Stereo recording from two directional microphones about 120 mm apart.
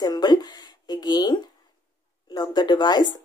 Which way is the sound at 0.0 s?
35° left (ahead or behind).